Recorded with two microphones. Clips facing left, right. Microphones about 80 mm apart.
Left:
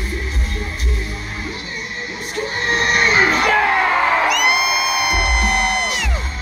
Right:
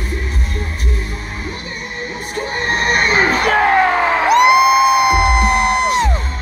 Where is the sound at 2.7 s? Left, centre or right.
Right.